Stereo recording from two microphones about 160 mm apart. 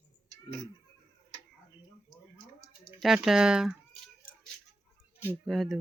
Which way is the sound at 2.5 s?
15° right (ahead or behind).